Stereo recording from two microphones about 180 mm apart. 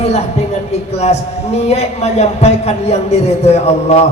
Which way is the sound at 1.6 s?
35° left (ahead or behind).